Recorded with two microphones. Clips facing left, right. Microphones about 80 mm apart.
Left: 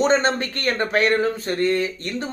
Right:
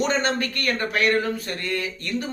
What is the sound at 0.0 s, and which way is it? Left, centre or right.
Speech, left.